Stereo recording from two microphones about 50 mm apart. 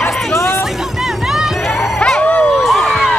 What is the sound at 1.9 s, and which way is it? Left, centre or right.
Dog, centre.